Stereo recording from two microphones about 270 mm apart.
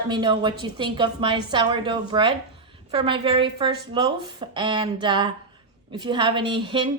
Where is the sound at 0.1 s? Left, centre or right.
Centre.